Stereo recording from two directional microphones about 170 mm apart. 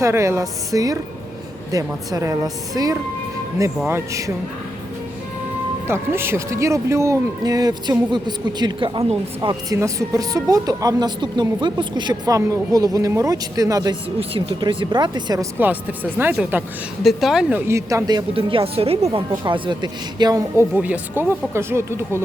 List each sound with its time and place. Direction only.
0.0 s speech: 15° right (ahead or behind)
5.9 s speech: 15° right (ahead or behind)
14.2 s speech: 30° right (ahead or behind)
15.5 s a woman's voice: 10° right (ahead or behind)
17.7 s speech: 15° right (ahead or behind)